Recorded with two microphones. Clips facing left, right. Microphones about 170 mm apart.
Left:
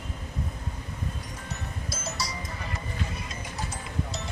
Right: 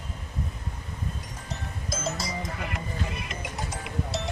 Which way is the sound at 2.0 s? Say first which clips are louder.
Right 4 dB; 60° right (ahead or behind).